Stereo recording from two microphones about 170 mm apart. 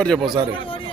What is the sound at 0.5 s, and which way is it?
Speech, 30° left (ahead or behind).